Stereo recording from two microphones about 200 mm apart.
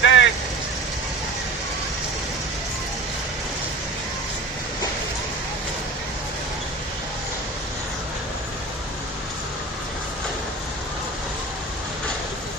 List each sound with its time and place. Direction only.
0.0 s vehicle: 65° left (ahead or behind)